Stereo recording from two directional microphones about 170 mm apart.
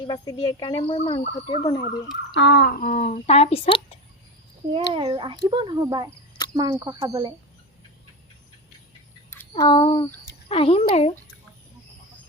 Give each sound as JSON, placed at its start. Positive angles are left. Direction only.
{"t": 0.1, "sound": "speech", "side_deg": 20}
{"t": 2.3, "sound": "a child's voice", "side_deg": 90}
{"t": 4.7, "sound": "a child's voice", "side_deg": -30}
{"t": 9.3, "sound": "a sound", "side_deg": 15}
{"t": 9.6, "sound": "speech", "side_deg": 30}